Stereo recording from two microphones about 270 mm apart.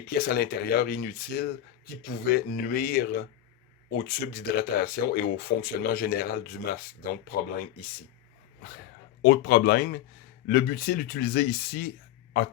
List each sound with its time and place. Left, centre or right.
0.1 s speech: left
9.2 s speech: left